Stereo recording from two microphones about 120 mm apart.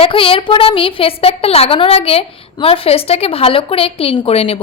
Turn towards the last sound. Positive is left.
turn(degrees=55)  # may be behind; listen again after turning